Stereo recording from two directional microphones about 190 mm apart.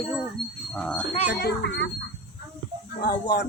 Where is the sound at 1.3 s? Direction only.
60° left (ahead or behind).